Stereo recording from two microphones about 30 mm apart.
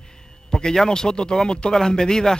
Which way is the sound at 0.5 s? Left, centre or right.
Left.